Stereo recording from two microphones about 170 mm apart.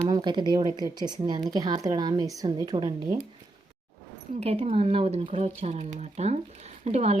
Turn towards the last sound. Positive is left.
turn(degrees=-40)  # may be behind; listen again after turning